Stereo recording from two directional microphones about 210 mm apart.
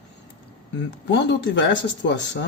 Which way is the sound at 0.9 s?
55° left (ahead or behind).